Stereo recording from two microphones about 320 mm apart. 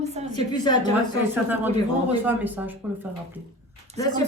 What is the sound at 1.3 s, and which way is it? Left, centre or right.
A man's voice, centre.